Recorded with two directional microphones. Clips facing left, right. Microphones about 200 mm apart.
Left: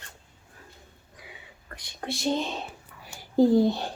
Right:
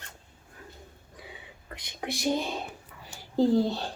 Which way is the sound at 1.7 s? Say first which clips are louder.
Even; 20° right (ahead or behind).